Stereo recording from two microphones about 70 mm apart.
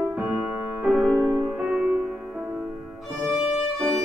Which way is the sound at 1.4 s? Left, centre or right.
Centre.